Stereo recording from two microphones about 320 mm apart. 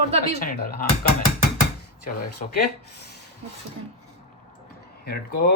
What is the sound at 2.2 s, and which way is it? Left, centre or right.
Speech, left.